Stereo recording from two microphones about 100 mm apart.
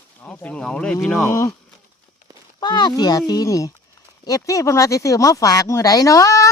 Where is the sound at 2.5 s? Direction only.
45° left (ahead or behind).